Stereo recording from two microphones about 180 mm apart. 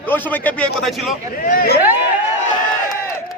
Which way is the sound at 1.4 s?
50° left (ahead or behind).